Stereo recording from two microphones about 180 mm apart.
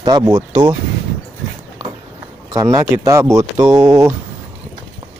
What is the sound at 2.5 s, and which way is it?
Speech, 20° right (ahead or behind).